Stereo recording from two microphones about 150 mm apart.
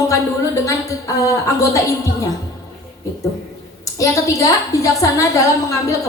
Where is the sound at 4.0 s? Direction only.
20° left (ahead or behind).